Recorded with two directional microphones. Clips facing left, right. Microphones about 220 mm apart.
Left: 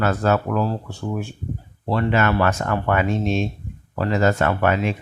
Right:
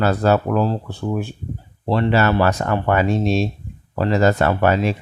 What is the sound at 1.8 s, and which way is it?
Speech, 30° right (ahead or behind).